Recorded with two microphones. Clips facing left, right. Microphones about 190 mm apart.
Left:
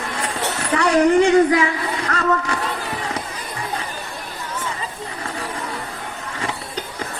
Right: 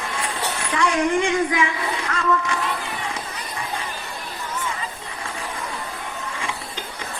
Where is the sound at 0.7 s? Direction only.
35° left (ahead or behind).